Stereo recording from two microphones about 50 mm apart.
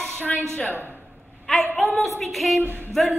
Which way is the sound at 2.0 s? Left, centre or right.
Centre.